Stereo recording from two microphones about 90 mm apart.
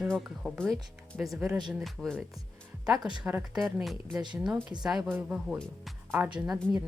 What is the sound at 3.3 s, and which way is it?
Speech, 20° right (ahead or behind).